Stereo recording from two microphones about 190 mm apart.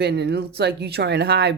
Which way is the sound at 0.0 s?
60° right (ahead or behind).